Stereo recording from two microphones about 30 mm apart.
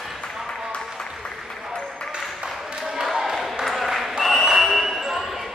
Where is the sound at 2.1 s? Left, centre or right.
Right.